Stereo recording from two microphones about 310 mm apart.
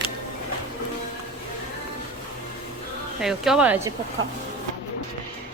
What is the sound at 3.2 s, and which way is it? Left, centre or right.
Speech, centre.